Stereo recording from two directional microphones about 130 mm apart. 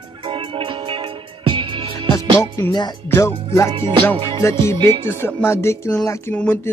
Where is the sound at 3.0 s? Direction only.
20° left (ahead or behind).